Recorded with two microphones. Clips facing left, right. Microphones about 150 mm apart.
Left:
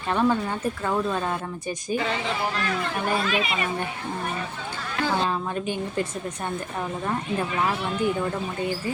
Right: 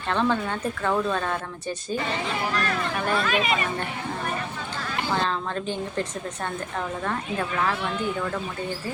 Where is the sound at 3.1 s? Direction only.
50° right (ahead or behind).